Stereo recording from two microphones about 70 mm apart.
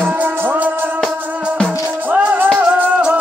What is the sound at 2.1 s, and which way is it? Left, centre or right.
Music, right.